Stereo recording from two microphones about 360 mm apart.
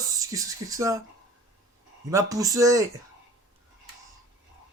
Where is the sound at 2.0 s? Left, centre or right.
Centre.